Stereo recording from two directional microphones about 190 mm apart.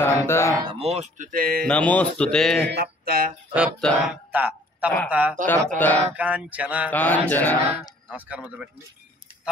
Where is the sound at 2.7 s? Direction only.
55° right (ahead or behind).